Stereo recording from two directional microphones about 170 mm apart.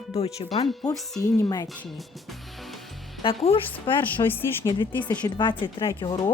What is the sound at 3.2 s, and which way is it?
Speech, 35° left (ahead or behind).